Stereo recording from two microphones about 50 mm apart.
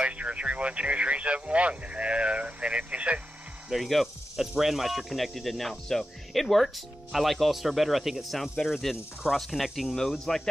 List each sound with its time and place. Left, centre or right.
0.0 s speech: right
3.7 s speech: centre
9.9 s speech: centre